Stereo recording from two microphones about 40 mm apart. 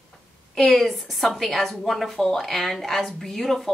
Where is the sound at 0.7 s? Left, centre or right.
Centre.